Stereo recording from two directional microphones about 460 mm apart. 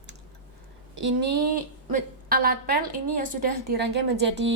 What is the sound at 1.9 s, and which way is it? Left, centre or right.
A woman's voice, centre.